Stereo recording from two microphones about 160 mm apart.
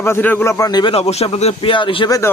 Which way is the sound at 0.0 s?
15° left (ahead or behind).